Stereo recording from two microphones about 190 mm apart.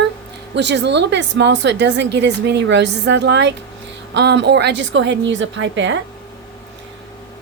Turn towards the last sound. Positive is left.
turn(degrees=-75)  # may be behind; listen again after turning